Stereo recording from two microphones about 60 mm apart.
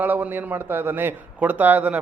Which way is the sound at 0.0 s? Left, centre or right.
Right.